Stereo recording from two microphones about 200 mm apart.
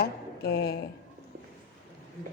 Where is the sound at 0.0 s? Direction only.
50° left (ahead or behind).